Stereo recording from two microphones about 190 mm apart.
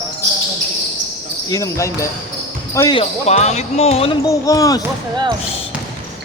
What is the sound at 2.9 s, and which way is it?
Speech, 35° left (ahead or behind).